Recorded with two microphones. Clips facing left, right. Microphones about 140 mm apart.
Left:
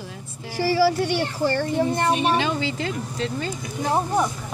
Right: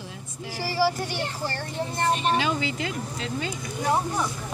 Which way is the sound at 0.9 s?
70° left (ahead or behind).